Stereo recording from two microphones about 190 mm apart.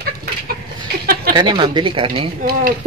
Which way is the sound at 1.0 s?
55° right (ahead or behind).